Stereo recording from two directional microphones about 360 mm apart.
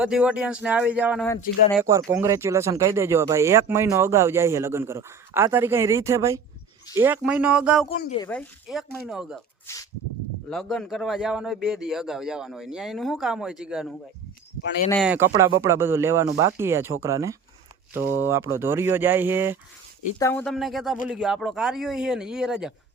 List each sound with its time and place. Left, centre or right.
0.0 s a man's voice: centre
7.9 s a woman's voice: centre
8.3 s a man's voice: centre
20.1 s a man's voice: centre